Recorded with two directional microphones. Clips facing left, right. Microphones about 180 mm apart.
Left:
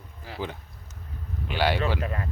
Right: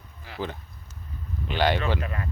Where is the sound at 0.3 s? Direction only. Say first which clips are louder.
Even; 35° left (ahead or behind).